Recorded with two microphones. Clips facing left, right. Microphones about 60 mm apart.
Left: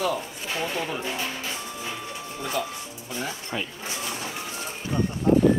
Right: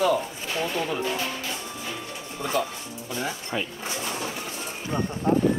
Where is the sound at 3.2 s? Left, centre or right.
Centre.